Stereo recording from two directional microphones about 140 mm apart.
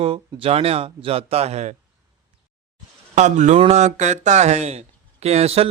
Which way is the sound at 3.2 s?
55° right (ahead or behind).